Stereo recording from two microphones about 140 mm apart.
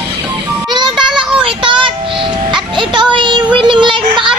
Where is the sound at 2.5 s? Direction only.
35° right (ahead or behind).